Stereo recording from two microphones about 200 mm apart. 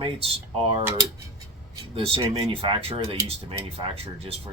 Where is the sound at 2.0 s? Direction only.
30° right (ahead or behind).